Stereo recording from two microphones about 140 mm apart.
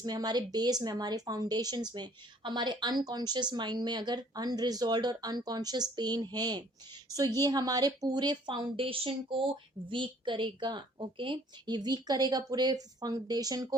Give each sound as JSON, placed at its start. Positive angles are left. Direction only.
{"t": 0.0, "sound": "a woman's voice", "side_deg": -30}